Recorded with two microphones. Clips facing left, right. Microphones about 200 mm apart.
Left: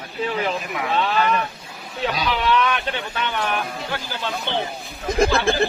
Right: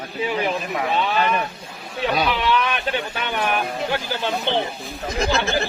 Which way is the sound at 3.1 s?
15° right (ahead or behind).